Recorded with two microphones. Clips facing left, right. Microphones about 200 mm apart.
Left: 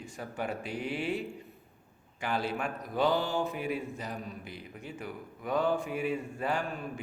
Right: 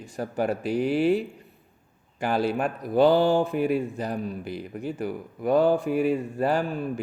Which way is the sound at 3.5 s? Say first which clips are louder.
Right 10 dB; 55° right (ahead or behind).